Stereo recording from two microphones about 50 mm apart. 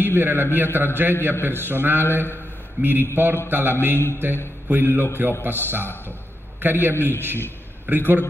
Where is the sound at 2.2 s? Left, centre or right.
Left.